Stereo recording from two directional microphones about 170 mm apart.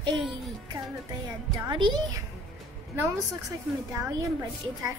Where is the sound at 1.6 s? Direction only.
25° right (ahead or behind).